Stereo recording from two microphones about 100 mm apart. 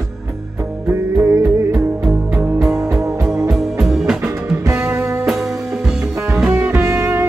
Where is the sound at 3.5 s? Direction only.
5° right (ahead or behind).